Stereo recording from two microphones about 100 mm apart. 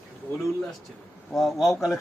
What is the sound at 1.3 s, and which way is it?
Speech, centre (ahead or behind).